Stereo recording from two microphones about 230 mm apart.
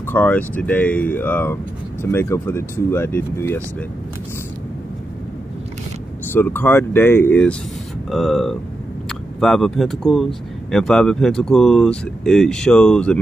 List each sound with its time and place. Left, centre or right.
0.0 s speech: centre
6.3 s speech: centre